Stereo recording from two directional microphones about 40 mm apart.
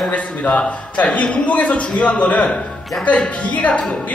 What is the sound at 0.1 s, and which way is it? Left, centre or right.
A woman's voice, left.